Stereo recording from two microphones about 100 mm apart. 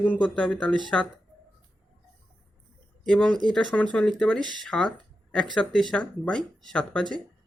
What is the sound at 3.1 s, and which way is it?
Speech, 10° left (ahead or behind).